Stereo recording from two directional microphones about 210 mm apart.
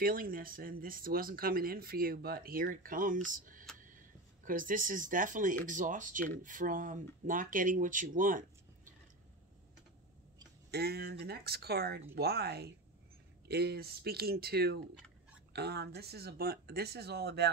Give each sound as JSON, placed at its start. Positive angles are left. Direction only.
{"t": 0.0, "sound": "speech", "side_deg": -40}
{"t": 10.7, "sound": "speech", "side_deg": -50}